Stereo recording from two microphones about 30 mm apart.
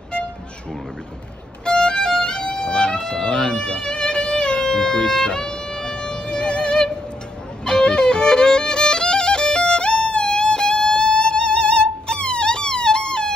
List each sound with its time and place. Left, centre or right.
1.6 s violin: left
2.4 s violin: left
2.7 s music: left
4.6 s wind instrument: left
5.2 s music: left
7.6 s music: left